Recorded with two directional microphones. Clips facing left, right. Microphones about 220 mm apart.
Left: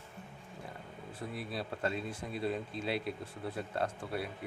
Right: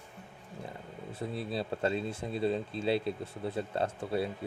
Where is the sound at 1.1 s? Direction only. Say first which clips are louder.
Right 5 dB; 25° right (ahead or behind).